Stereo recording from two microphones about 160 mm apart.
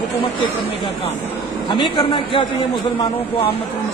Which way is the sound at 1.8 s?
30° left (ahead or behind).